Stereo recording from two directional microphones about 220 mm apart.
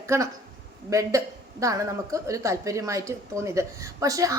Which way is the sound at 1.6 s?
15° right (ahead or behind).